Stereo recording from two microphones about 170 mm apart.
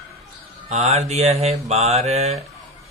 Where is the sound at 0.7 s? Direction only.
40° right (ahead or behind).